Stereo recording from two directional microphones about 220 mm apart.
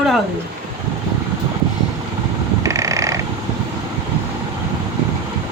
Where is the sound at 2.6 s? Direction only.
15° right (ahead or behind).